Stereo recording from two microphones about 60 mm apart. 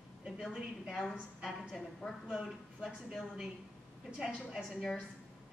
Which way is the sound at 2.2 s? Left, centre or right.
Centre.